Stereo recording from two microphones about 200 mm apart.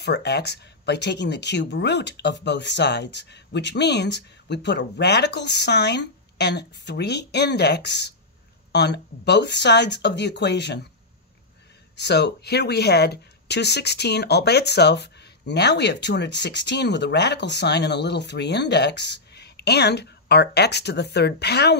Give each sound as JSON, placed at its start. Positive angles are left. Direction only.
{"t": 0.0, "sound": "speech", "side_deg": 55}
{"t": 12.0, "sound": "speech", "side_deg": 55}